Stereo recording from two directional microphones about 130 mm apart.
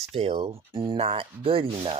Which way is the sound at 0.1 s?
50° right (ahead or behind).